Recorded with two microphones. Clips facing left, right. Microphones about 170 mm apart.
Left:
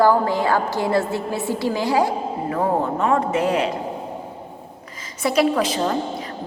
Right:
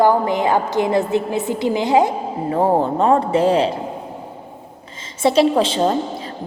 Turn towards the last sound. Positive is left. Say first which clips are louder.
# right 4 dB
turn(degrees=-30)  # may be behind; listen again after turning